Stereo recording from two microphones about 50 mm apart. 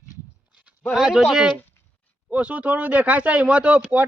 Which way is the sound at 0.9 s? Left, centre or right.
Centre.